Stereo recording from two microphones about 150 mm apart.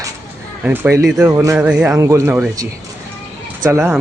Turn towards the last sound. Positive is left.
turn(degrees=-15)  # may be behind; listen again after turning